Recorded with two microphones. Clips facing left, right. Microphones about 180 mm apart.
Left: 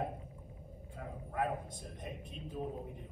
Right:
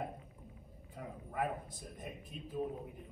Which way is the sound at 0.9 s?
10° right (ahead or behind).